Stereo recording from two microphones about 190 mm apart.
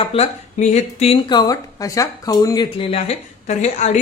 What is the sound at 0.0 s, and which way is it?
Speech, 30° left (ahead or behind).